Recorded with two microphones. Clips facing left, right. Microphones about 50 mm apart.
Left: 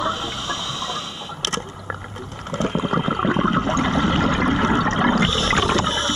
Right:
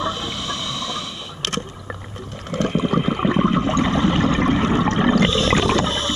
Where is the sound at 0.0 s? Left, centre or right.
Left.